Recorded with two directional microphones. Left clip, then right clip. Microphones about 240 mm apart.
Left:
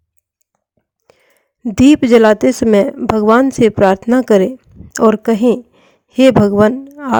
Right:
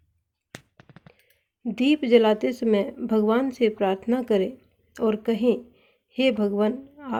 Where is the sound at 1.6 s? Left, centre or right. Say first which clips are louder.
Left 13 dB; left.